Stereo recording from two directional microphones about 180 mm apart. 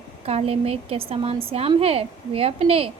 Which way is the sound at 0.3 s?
35° right (ahead or behind).